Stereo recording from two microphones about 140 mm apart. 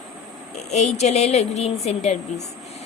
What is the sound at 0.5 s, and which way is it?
A woman's voice, 55° left (ahead or behind).